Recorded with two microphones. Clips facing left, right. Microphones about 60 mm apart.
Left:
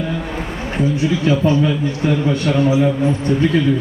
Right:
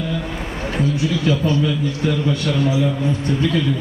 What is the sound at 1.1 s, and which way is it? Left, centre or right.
A man's voice, left.